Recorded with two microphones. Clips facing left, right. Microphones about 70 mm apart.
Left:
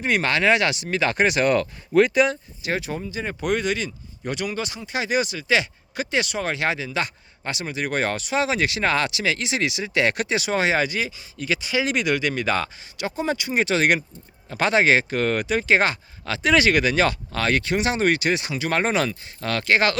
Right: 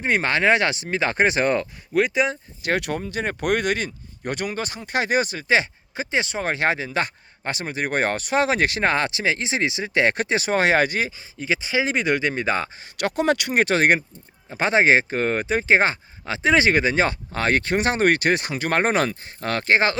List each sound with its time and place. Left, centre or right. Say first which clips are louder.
0.0 s speech: right 1 dB; right
2.0 s speech: left 3 dB; centre
2.6 s speech: right 3 dB; right
11.3 s speech: right 1 dB; right
13.0 s speech: right 4 dB; right
14.5 s speech: right 1 dB; right